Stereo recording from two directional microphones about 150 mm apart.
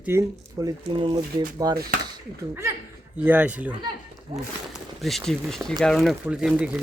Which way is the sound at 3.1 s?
10° right (ahead or behind).